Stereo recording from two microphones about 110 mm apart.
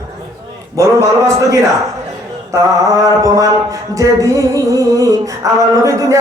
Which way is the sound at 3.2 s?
30° right (ahead or behind).